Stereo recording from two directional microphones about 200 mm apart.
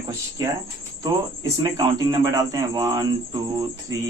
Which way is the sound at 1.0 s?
20° right (ahead or behind).